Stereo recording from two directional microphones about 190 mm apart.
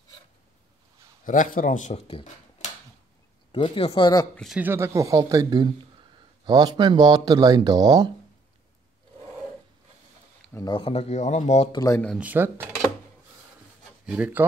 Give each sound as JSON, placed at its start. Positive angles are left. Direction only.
{"t": 1.2, "sound": "a man's voice", "side_deg": 45}
{"t": 3.5, "sound": "speech", "side_deg": 30}
{"t": 4.4, "sound": "speech", "side_deg": -5}
{"t": 10.5, "sound": "speech", "side_deg": 20}
{"t": 11.7, "sound": "speech", "side_deg": 20}
{"t": 12.2, "sound": "speech", "side_deg": -10}
{"t": 14.0, "sound": "speech", "side_deg": -5}